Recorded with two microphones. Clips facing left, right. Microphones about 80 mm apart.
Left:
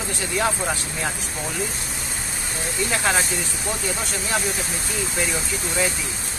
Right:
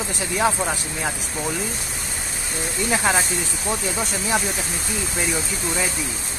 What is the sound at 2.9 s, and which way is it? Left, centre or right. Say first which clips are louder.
Speech: right 2 dB; centre.